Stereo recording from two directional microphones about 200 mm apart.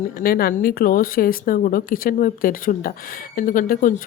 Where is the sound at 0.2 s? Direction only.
50° left (ahead or behind).